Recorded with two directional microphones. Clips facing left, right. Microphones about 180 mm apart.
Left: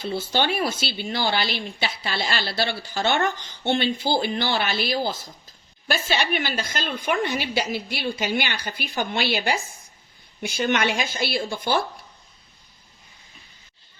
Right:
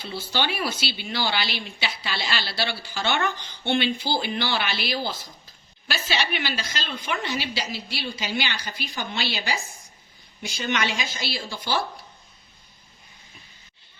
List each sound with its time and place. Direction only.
0.0 s speech: 50° left (ahead or behind)